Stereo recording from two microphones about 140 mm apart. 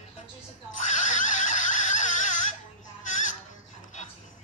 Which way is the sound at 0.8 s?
65° left (ahead or behind).